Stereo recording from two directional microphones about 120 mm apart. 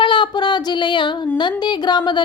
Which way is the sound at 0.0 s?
40° left (ahead or behind).